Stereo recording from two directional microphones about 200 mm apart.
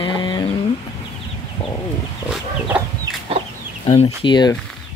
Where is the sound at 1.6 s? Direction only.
30° left (ahead or behind).